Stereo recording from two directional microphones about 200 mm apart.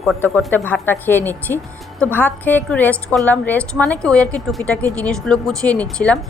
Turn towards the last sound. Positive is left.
turn(degrees=5)  # may be behind; listen again after turning